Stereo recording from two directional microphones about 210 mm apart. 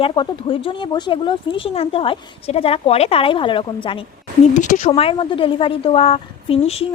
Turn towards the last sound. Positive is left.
turn(degrees=30)  # may be behind; listen again after turning